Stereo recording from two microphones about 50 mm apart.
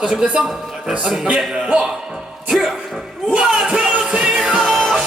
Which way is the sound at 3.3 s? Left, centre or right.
Centre.